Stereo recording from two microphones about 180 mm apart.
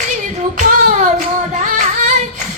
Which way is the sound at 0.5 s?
45° right (ahead or behind).